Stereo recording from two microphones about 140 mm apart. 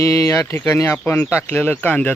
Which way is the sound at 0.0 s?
20° left (ahead or behind).